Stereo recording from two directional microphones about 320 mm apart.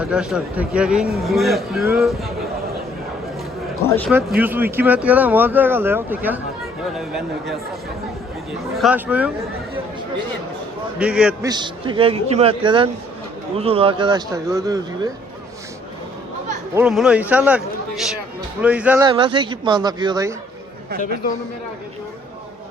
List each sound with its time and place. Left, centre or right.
0.0 s speech: centre
3.8 s speech: centre
4.4 s speech: centre
8.7 s speech: centre
10.9 s speech: centre
11.5 s a man's voice: centre
16.7 s a man's voice: centre